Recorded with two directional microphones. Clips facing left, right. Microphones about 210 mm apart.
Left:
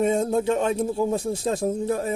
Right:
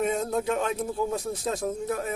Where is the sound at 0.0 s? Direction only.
30° left (ahead or behind).